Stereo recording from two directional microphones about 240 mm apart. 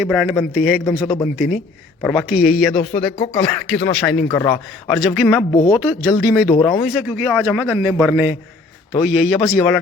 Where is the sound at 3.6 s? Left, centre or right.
Centre.